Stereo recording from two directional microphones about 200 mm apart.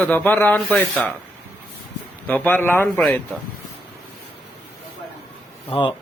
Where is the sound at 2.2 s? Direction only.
10° left (ahead or behind).